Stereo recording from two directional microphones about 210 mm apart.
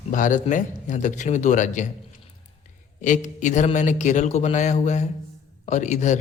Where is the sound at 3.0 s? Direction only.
35° left (ahead or behind).